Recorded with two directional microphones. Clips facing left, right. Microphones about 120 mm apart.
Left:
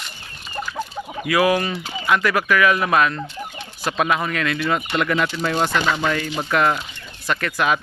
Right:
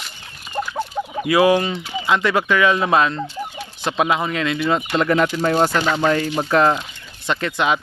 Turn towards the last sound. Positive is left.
turn(degrees=-25)  # may be behind; listen again after turning